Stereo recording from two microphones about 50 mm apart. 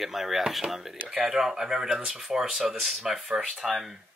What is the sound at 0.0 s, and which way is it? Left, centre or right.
Speech, centre.